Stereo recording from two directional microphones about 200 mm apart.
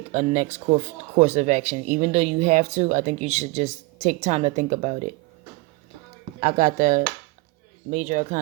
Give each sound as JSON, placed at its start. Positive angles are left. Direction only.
{"t": 0.1, "sound": "speech", "side_deg": -35}
{"t": 6.4, "sound": "speech", "side_deg": -40}